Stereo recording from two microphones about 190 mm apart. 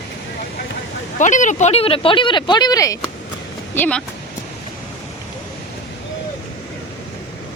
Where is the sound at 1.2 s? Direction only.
40° left (ahead or behind); by 3.0 s 20° left (ahead or behind).